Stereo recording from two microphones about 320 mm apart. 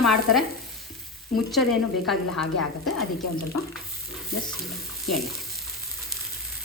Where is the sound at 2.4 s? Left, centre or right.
Left.